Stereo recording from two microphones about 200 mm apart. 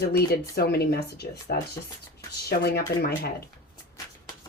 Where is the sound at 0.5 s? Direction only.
50° left (ahead or behind).